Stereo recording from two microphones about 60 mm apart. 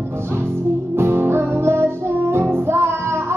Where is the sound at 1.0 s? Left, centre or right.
Right.